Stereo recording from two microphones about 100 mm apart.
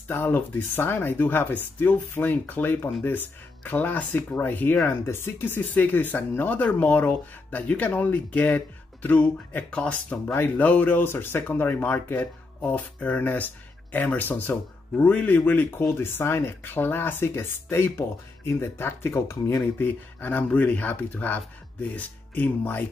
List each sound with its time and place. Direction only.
0.1 s speech: 20° left (ahead or behind)